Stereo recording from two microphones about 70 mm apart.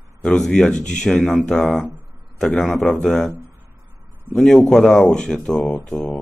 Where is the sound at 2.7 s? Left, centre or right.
Left.